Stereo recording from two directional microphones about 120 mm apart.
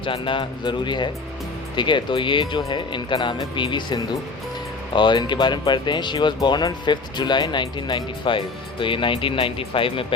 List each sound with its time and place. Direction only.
0.0 s speech: 45° left (ahead or behind)